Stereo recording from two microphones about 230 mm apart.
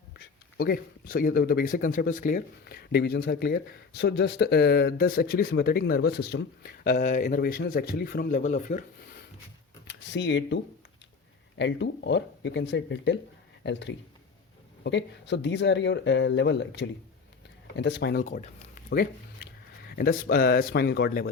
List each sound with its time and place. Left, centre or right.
0.2 s speech: left
9.8 s a sound: left
11.5 s speech: left
18.3 s speech: left
18.9 s a sound: left
19.9 s speech: left